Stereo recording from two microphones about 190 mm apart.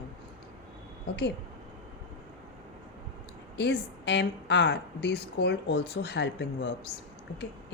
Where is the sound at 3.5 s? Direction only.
65° left (ahead or behind).